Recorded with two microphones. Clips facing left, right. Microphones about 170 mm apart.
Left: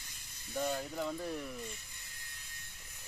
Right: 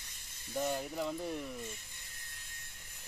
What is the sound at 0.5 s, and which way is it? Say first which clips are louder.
Speech: right 1 dB; 5° right (ahead or behind).